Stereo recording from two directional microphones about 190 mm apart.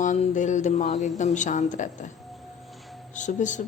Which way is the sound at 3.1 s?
40° left (ahead or behind).